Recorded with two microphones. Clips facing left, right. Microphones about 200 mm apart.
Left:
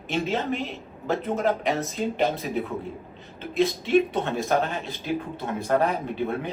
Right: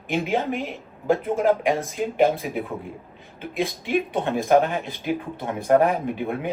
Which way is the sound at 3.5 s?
15° right (ahead or behind).